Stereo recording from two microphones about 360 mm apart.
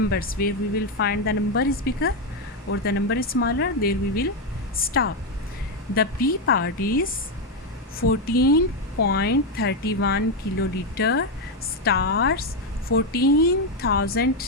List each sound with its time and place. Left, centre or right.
0.1 s speech: left
8.3 s speech: left